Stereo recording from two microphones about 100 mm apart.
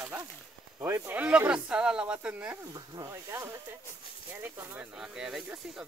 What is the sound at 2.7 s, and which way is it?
Speech, 45° right (ahead or behind).